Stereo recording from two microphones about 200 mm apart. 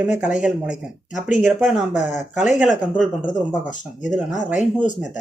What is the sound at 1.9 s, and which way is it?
Speech, 35° left (ahead or behind).